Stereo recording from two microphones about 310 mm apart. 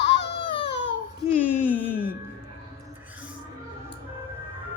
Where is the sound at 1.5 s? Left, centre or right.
Centre.